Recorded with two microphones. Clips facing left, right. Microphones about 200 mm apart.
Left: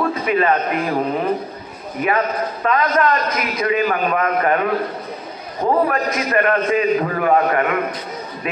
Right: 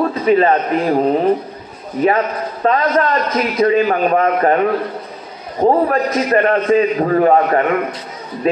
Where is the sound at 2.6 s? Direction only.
30° right (ahead or behind).